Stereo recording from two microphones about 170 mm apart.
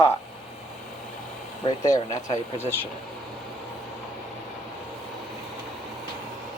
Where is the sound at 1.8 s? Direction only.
20° left (ahead or behind).